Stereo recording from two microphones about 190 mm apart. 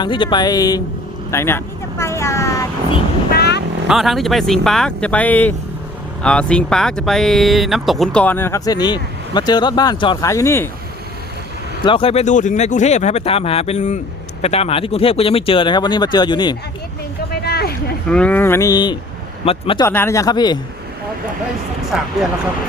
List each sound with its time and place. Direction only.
0.0 s speech: 25° left (ahead or behind)
1.3 s vehicle: 15° left (ahead or behind)
3.3 s vehicle: 60° left (ahead or behind)
3.8 s speech: centre (ahead or behind)
11.9 s speech: 30° left (ahead or behind)
17.4 s vehicle: 55° left (ahead or behind)
18.1 s speech: 5° left (ahead or behind); by 19.8 s 30° left (ahead or behind)
19.8 s speech: 10° left (ahead or behind)